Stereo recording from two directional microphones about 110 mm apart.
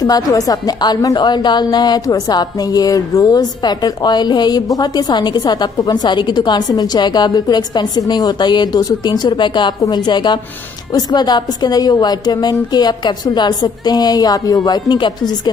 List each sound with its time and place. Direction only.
0.0 s a woman's voice: 35° left (ahead or behind)